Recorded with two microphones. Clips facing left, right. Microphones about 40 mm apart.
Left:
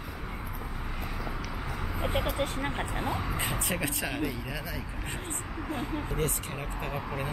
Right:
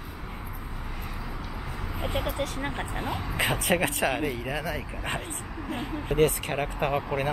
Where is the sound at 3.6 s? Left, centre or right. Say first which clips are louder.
Right 7 dB; right.